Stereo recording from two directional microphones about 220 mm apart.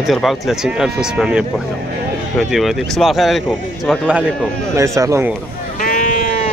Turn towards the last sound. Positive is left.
turn(degrees=35)  # may be behind; listen again after turning